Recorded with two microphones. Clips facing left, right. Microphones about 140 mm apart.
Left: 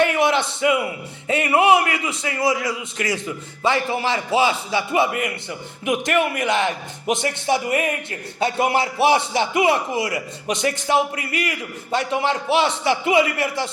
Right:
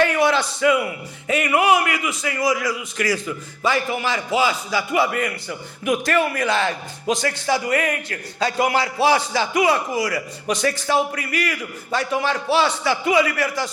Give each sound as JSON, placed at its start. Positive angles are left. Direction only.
{"t": 0.0, "sound": "a man's voice", "side_deg": 25}